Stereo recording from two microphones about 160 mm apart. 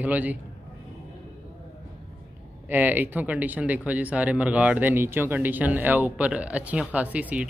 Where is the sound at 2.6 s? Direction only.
10° right (ahead or behind).